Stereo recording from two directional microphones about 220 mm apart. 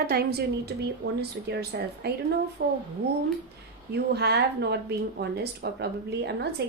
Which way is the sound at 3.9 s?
45° right (ahead or behind).